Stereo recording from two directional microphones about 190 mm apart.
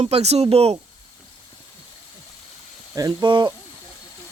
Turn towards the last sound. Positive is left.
turn(degrees=-25)  # may be behind; listen again after turning